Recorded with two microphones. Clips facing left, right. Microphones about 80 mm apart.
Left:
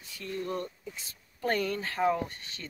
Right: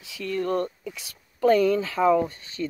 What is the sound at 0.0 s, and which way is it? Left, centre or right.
Speech, right.